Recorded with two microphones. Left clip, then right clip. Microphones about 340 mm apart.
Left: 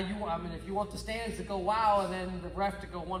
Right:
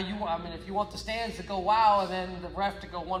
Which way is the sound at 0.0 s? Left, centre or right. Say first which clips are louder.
Right 3 dB; centre.